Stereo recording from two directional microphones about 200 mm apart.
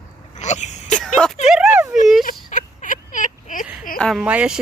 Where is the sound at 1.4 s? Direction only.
5° right (ahead or behind).